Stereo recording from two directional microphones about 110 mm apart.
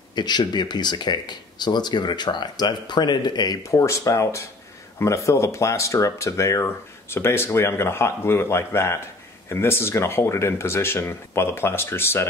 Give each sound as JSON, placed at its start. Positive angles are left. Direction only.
{"t": 0.1, "sound": "speech", "side_deg": 40}